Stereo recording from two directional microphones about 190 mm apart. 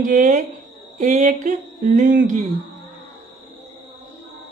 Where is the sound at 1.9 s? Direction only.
45° right (ahead or behind).